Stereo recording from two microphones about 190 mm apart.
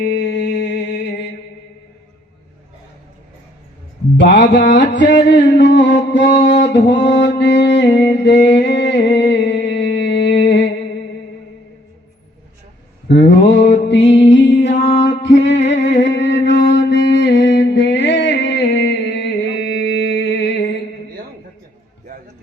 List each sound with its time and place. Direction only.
0.0 s mantra: 65° left (ahead or behind)
4.2 s music: 65° left (ahead or behind)
7.3 s a sound: 65° left (ahead or behind)
13.1 s mantra: 70° left (ahead or behind)
15.9 s music: 70° left (ahead or behind)